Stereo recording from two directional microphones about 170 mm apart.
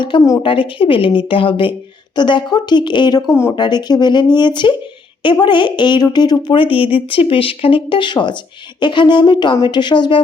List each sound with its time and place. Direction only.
0.0 s a woman's voice: 25° left (ahead or behind)